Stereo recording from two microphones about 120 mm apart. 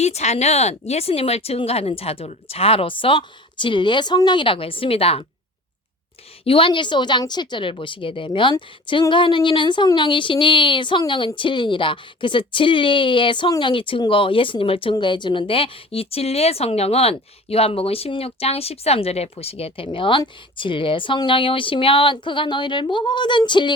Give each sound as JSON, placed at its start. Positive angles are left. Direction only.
{"t": 0.0, "sound": "a woman's voice", "side_deg": 65}
{"t": 6.4, "sound": "a woman's voice", "side_deg": 50}